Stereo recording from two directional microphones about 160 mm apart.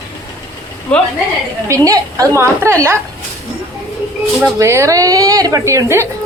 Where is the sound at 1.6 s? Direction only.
20° right (ahead or behind).